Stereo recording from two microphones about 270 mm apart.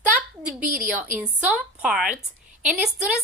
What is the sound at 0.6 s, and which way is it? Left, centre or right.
Speech, right.